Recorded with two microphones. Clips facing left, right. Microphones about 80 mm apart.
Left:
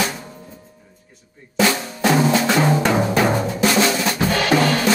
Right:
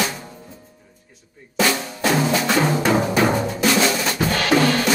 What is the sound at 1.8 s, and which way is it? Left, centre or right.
Drum, centre.